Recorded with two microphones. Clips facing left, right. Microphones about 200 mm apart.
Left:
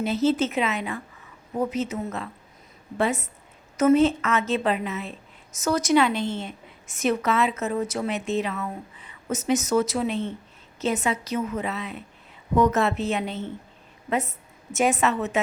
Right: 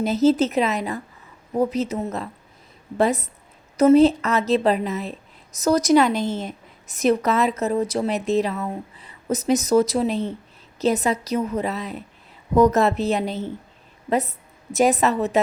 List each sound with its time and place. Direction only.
0.0 s a woman's voice: 40° right (ahead or behind)